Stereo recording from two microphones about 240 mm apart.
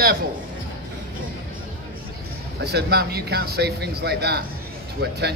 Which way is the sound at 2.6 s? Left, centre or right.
Right.